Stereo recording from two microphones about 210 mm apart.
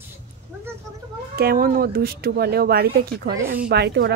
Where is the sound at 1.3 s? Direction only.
45° right (ahead or behind).